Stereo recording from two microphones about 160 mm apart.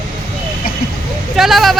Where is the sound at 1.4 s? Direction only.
Centre (ahead or behind).